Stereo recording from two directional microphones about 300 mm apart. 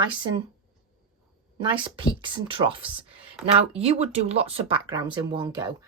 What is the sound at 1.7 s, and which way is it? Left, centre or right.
Speech, centre.